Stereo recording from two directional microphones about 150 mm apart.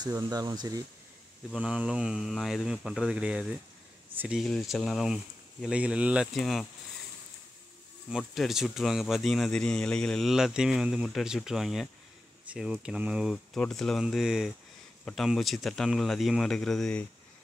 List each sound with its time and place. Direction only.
0.0 s speech: 25° right (ahead or behind)
1.5 s speech: 5° right (ahead or behind)
4.1 s a sound: 10° right (ahead or behind)
4.4 s speech: centre (ahead or behind)
8.1 s speech: centre (ahead or behind)